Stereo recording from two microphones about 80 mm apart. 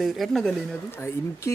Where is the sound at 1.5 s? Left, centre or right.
Left.